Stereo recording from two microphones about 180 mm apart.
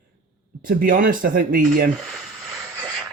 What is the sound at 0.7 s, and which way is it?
Speech, 50° right (ahead or behind).